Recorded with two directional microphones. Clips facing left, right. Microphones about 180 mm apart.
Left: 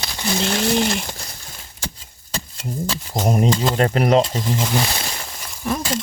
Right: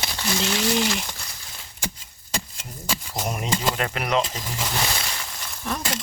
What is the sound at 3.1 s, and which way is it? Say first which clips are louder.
Speech: left 10 dB; 35° left (ahead or behind).